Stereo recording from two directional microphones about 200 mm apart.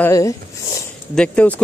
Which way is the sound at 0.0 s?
15° left (ahead or behind).